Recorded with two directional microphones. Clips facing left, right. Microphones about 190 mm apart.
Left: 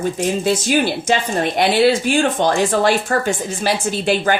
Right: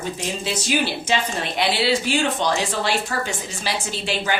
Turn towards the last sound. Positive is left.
turn(degrees=50)  # may be behind; listen again after turning